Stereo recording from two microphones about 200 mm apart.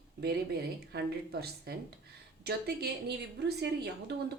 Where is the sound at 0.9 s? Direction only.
50° right (ahead or behind).